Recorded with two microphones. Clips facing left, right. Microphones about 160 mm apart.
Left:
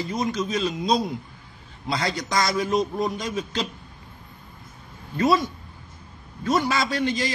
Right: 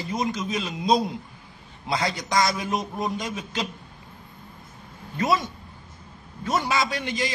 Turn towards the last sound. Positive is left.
turn(degrees=-15)  # may be behind; listen again after turning